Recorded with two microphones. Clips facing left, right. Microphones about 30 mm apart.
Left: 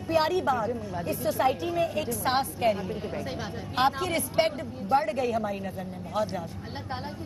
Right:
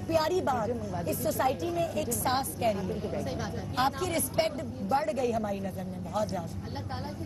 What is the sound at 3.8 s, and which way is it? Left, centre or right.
A woman's voice, left.